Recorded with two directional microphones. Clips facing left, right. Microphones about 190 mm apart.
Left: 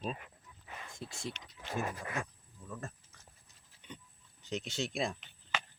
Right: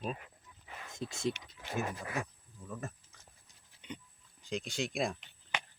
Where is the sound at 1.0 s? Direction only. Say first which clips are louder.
Right 8 dB; 20° right (ahead or behind).